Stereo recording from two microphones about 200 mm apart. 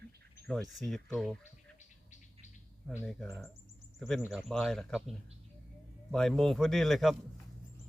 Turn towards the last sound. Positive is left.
turn(degrees=0)  # may be behind; listen again after turning